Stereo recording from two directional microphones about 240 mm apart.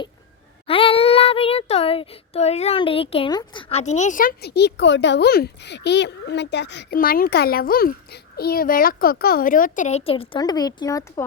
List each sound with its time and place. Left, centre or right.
0.7 s child singing: left